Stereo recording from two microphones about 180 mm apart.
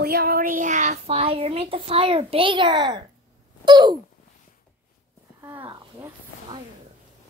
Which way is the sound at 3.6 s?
25° right (ahead or behind).